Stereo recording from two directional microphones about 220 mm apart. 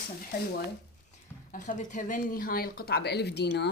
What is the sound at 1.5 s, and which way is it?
Speech, 35° left (ahead or behind).